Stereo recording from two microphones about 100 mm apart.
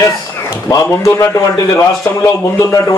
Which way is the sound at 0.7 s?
30° left (ahead or behind).